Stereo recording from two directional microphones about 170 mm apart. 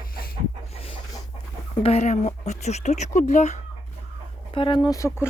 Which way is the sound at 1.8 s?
40° left (ahead or behind).